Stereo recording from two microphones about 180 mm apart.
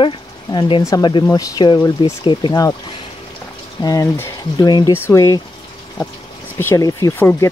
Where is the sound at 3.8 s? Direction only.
20° left (ahead or behind).